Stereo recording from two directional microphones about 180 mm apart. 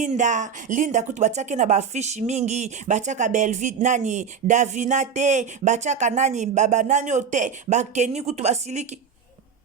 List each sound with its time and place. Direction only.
0.0 s speech: 40° right (ahead or behind)